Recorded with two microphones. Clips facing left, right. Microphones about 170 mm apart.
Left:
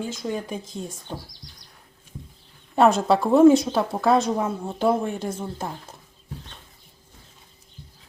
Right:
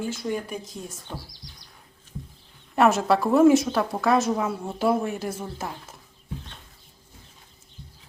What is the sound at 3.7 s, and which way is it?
Speech, 25° left (ahead or behind).